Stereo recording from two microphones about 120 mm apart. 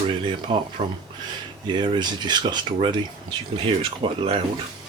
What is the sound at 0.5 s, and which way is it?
Speech, 45° right (ahead or behind).